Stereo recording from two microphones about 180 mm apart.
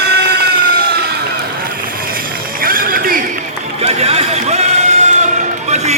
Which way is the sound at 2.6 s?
50° right (ahead or behind).